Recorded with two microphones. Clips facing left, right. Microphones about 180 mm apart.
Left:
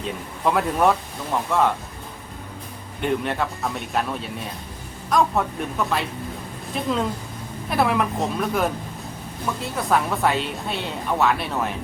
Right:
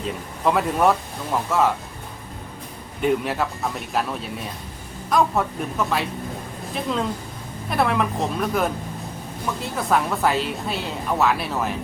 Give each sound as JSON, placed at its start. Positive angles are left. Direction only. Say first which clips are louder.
{"t": 0.0, "sound": "speech", "louder": "right 1 dB", "side_deg": 0}
{"t": 3.0, "sound": "speech", "louder": "right 2 dB", "side_deg": -5}